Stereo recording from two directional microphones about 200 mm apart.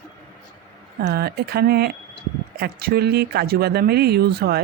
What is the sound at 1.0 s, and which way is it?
Speech, 50° right (ahead or behind).